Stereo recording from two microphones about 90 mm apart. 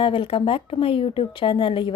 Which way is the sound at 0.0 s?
75° left (ahead or behind).